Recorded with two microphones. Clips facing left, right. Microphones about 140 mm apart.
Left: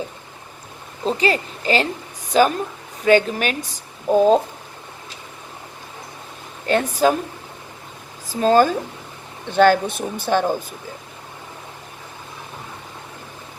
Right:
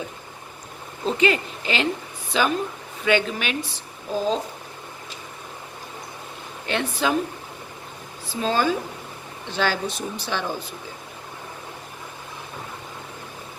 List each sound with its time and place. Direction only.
1.0 s a woman's voice: 35° left (ahead or behind); by 4.4 s 55° left (ahead or behind)
6.7 s a woman's voice: 40° left (ahead or behind)
8.3 s speech: 45° left (ahead or behind)